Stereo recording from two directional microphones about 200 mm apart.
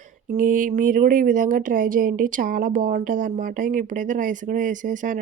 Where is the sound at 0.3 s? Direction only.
40° right (ahead or behind).